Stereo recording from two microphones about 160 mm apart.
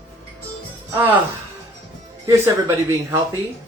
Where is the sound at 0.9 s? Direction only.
15° right (ahead or behind).